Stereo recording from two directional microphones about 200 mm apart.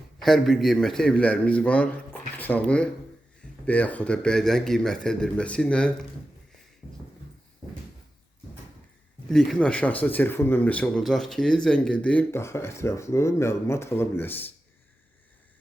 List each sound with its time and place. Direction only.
0.2 s a man's voice: centre (ahead or behind)
9.3 s speech: centre (ahead or behind)